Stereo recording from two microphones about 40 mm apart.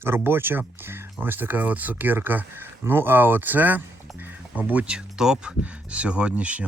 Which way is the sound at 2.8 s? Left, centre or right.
Right.